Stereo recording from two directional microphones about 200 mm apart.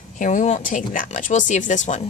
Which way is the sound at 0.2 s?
40° left (ahead or behind).